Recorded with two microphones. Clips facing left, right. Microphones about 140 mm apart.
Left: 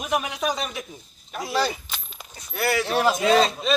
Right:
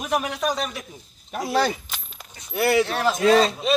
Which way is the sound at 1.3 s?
50° right (ahead or behind).